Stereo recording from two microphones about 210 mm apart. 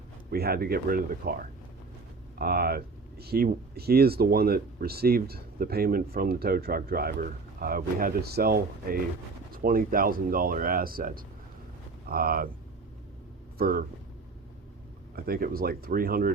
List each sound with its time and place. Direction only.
0.3 s speech: 45° right (ahead or behind)
2.4 s speech: 45° right (ahead or behind)
13.6 s speech: 45° right (ahead or behind)
15.1 s speech: 45° right (ahead or behind)